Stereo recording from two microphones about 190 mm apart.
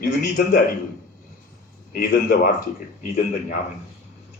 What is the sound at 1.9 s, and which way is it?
Speech, 50° left (ahead or behind).